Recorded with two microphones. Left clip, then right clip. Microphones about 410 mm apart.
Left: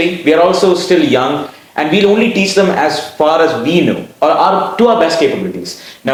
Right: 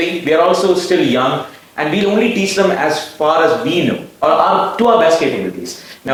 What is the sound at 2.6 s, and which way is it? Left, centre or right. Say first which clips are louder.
Speech: left 2 dB; left.